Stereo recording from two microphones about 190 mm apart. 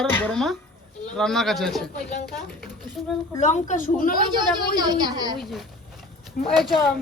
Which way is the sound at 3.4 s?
40° left (ahead or behind).